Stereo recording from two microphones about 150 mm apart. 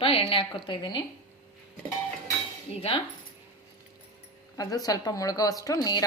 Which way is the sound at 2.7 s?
40° left (ahead or behind).